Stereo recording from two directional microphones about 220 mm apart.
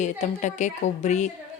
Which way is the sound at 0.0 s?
35° left (ahead or behind).